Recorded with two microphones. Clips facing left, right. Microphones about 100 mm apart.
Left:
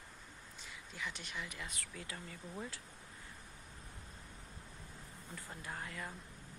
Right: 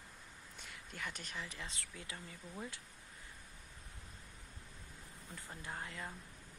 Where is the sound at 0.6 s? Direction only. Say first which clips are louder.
Left 1 dB; 50° right (ahead or behind); by 2.3 s 25° right (ahead or behind).